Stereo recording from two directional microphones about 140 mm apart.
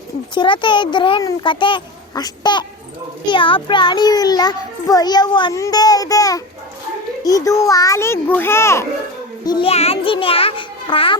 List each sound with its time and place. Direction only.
0.3 s a child's voice: 35° left (ahead or behind); by 8.9 s 20° left (ahead or behind)
9.4 s music: 30° left (ahead or behind)
9.6 s a child's voice: 45° left (ahead or behind)